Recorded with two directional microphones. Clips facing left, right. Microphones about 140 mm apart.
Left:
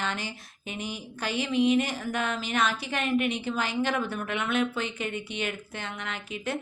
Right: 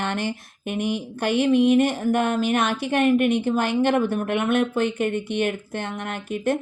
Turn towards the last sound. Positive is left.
turn(degrees=-50)  # may be behind; listen again after turning